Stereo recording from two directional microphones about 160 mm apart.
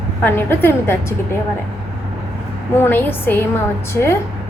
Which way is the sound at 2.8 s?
10° left (ahead or behind).